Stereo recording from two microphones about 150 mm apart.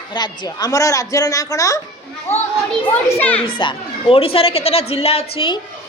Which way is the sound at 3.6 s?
35° left (ahead or behind).